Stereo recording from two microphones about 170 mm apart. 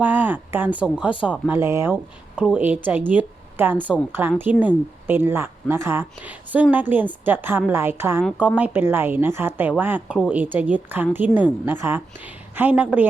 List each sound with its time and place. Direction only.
0.0 s a woman's voice: 10° right (ahead or behind)